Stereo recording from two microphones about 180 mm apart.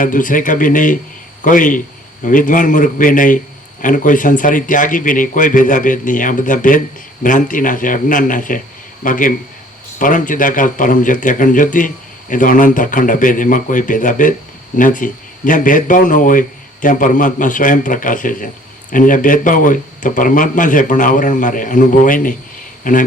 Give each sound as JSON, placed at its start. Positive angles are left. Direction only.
{"t": 0.0, "sound": "a man's voice", "side_deg": 45}